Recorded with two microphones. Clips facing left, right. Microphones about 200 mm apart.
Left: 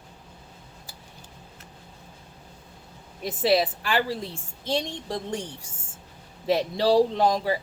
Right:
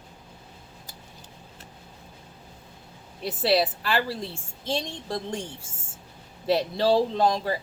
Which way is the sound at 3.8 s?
15° left (ahead or behind).